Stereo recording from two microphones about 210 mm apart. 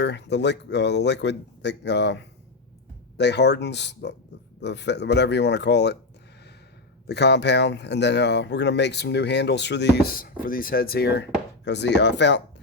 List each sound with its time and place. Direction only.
0.0 s speech: 55° left (ahead or behind)
7.1 s speech: 55° left (ahead or behind)